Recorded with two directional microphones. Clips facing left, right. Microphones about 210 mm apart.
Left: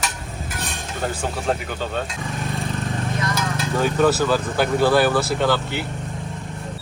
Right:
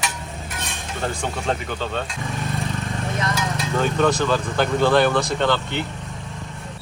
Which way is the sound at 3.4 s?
5° left (ahead or behind).